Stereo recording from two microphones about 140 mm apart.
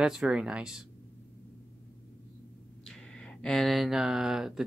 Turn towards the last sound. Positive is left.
turn(degrees=-5)  # may be behind; listen again after turning